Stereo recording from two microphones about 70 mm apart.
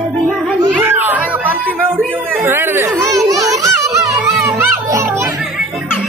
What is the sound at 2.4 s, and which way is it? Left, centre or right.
Chatter, right.